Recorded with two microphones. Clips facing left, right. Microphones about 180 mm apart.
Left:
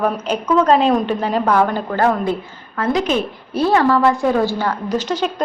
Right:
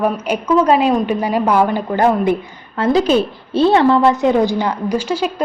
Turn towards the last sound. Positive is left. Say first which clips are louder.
# right 2 dB
turn(degrees=-10)  # may be behind; listen again after turning